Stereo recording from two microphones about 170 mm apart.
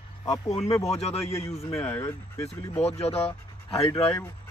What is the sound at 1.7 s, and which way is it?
Speech, 15° left (ahead or behind).